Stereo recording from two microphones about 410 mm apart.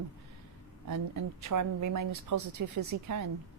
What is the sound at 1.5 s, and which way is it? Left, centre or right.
Speech, right.